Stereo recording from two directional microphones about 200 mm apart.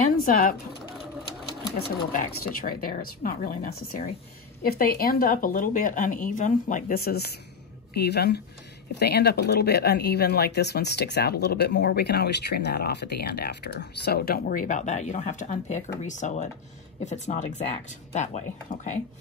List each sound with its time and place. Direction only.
0.2 s speech: 45° left (ahead or behind)
1.9 s speech: 50° left (ahead or behind)